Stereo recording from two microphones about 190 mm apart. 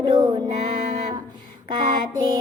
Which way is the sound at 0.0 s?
25° right (ahead or behind).